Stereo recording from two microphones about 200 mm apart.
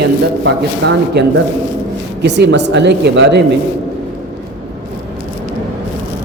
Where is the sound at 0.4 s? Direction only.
60° right (ahead or behind).